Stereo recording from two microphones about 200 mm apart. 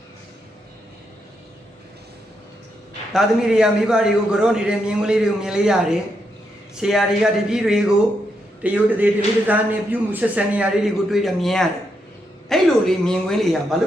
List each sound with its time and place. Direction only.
3.1 s a man's voice: centre (ahead or behind)